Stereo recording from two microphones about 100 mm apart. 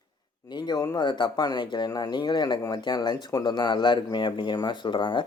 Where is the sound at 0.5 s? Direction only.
45° left (ahead or behind).